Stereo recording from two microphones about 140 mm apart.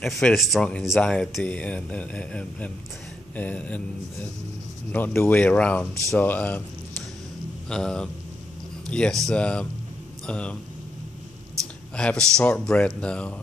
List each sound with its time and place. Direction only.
0.0 s speech: centre (ahead or behind)
4.9 s speech: 15° left (ahead or behind)
7.7 s speech: 5° left (ahead or behind)
11.9 s speech: 5° left (ahead or behind)